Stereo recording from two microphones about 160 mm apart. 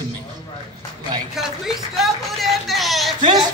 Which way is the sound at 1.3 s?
Centre (ahead or behind).